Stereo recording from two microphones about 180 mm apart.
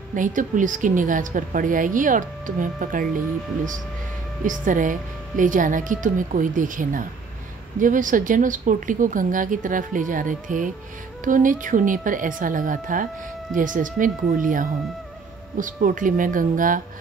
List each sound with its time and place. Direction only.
0.1 s a woman's voice: 45° right (ahead or behind)
4.5 s a woman's voice: 45° right (ahead or behind)